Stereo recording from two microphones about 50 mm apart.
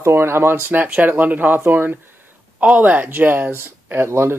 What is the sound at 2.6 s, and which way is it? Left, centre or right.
Speech, right.